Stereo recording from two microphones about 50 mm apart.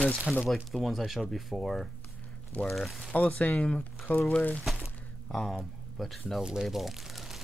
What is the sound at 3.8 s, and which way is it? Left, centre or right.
Speech, left.